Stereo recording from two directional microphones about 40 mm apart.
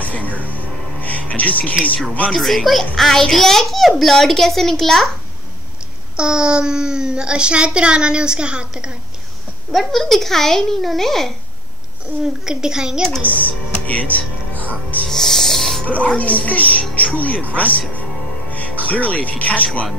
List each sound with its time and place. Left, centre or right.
0.0 s speech: left
1.0 s music: left
2.3 s a child's voice: centre
6.1 s a child's voice: right
9.7 s a child's voice: centre
12.4 s a woman's voice: centre
13.2 s speech: left
15.0 s music: centre
15.9 s a woman's voice: left